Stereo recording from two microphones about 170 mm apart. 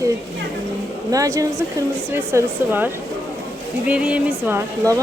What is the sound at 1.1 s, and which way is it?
Speech, 20° right (ahead or behind).